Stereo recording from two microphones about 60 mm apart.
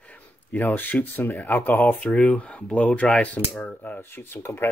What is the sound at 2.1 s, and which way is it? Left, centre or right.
Speech, left.